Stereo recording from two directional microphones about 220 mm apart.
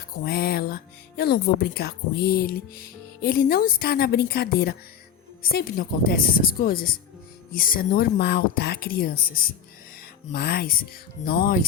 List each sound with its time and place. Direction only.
0.3 s speech: 45° left (ahead or behind)